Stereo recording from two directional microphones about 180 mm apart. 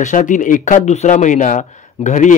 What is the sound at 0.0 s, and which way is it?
Speech, 45° left (ahead or behind).